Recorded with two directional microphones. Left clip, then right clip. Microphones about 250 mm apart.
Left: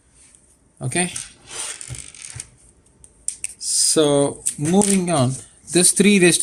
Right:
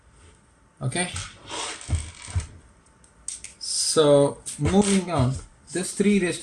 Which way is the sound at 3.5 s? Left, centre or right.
Left.